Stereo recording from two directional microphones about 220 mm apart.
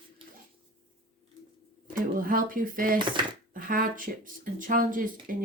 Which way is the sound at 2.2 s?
40° right (ahead or behind).